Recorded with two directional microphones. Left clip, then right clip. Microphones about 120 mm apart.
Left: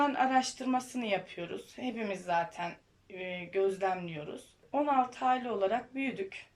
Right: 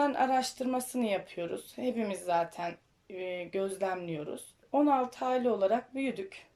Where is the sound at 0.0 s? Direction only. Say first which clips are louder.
Even; 35° right (ahead or behind).